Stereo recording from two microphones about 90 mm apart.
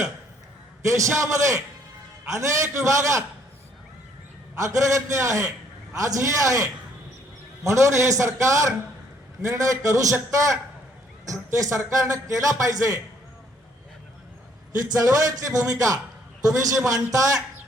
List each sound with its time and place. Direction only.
0.9 s a man's voice: 35° right (ahead or behind)
4.6 s a man's voice: 35° right (ahead or behind)
14.9 s a man's voice: 40° right (ahead or behind)